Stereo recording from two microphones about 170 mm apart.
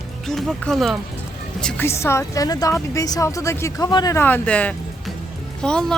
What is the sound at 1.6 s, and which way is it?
A woman's voice, 10° left (ahead or behind).